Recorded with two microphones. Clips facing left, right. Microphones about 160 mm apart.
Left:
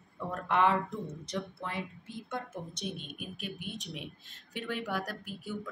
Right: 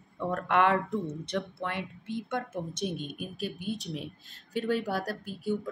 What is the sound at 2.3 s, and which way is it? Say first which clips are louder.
Speech: right 2 dB; 50° right (ahead or behind).